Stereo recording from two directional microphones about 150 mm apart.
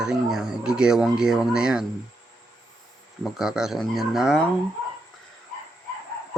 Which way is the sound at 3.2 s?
5° right (ahead or behind).